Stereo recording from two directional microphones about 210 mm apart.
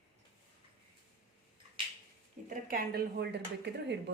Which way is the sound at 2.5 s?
45° right (ahead or behind).